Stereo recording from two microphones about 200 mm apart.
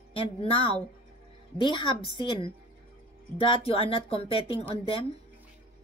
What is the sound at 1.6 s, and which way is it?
A woman's voice, 25° left (ahead or behind).